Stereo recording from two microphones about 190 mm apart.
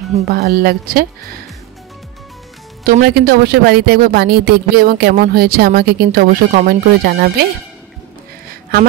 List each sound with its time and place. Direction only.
0.3 s speech: 55° right (ahead or behind)
2.8 s speech: 50° right (ahead or behind)